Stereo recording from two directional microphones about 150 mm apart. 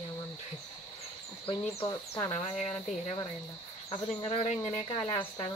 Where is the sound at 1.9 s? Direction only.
20° left (ahead or behind).